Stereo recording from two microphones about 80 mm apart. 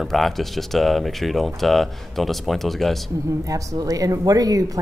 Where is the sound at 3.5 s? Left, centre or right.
Right.